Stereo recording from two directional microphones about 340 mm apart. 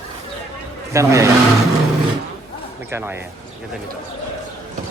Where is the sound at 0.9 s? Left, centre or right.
Centre.